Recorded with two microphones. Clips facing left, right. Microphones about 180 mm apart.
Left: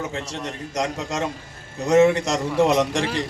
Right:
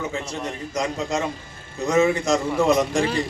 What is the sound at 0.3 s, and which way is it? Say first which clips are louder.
A man's voice: right 1 dB; 75° left (ahead or behind).